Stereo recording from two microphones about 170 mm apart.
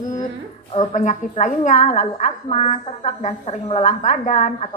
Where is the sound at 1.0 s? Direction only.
45° left (ahead or behind).